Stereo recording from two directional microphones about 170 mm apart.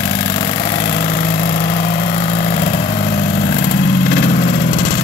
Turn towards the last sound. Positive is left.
turn(degrees=80)